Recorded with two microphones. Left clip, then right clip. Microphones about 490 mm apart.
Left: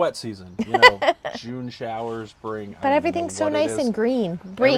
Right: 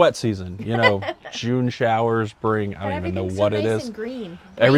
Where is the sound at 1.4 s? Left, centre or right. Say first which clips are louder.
Right 10 dB; right.